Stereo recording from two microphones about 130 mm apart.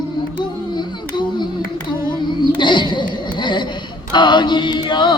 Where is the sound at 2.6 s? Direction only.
35° left (ahead or behind).